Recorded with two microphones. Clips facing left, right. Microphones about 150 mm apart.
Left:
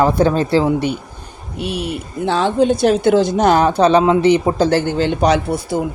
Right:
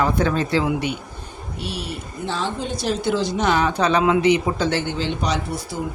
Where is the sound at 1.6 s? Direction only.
55° left (ahead or behind).